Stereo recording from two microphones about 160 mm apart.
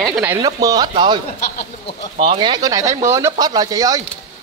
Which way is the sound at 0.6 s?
25° right (ahead or behind).